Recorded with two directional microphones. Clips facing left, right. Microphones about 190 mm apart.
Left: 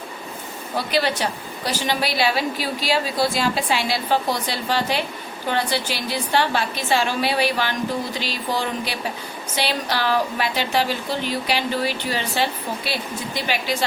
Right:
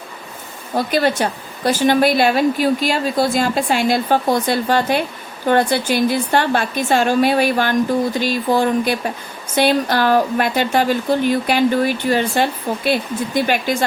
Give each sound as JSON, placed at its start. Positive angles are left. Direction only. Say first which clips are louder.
{"t": 0.8, "sound": "a woman's voice", "louder": "right 5 dB", "side_deg": -50}